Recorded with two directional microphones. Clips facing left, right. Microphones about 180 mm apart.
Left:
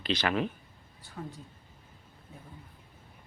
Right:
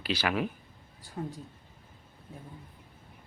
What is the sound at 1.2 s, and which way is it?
Speech, 20° right (ahead or behind).